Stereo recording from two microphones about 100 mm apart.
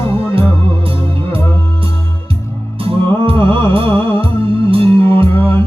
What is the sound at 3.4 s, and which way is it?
Music, 60° right (ahead or behind).